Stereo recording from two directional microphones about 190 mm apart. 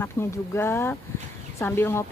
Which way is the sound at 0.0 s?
15° left (ahead or behind).